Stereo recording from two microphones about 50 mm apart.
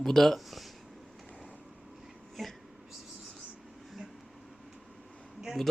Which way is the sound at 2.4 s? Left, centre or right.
Centre.